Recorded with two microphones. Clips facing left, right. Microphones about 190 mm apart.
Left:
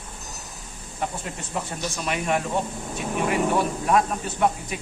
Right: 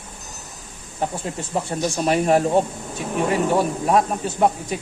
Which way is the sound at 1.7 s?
30° right (ahead or behind).